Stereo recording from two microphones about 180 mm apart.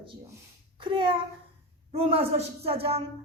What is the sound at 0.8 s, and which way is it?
A woman's voice, 25° right (ahead or behind).